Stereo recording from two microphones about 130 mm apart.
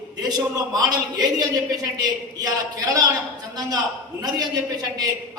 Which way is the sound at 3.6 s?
30° right (ahead or behind).